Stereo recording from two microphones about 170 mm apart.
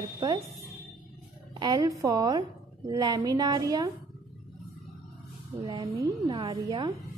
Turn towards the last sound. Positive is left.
turn(degrees=-25)  # may be behind; listen again after turning